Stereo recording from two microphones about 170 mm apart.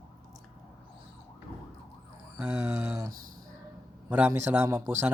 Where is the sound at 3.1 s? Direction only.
55° right (ahead or behind).